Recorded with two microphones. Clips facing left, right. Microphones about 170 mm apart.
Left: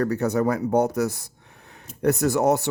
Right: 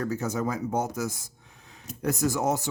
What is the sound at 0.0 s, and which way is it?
Speech, 65° left (ahead or behind).